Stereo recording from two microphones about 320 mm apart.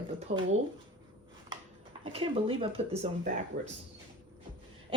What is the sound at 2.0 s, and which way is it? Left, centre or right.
Speech, centre.